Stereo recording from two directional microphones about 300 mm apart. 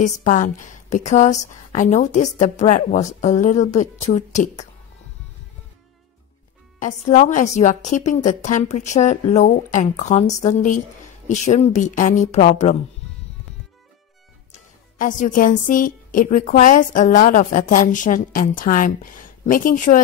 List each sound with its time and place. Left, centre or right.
0.0 s a woman's voice: left
6.8 s a woman's voice: left
15.0 s a woman's voice: left